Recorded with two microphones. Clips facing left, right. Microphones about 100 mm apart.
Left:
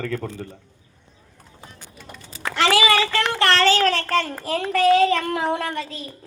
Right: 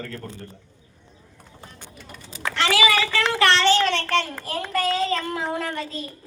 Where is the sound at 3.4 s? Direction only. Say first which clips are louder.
Left 1 dB; 40° left (ahead or behind).